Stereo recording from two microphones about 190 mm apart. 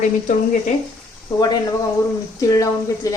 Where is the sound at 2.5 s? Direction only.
15° left (ahead or behind).